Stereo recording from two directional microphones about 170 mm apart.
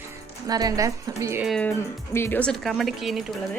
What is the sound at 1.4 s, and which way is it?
Speech, centre (ahead or behind).